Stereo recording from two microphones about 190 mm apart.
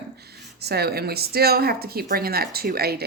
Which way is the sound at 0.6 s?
55° right (ahead or behind).